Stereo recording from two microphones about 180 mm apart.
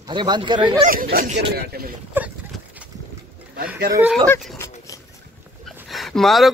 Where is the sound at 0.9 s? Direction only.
50° right (ahead or behind).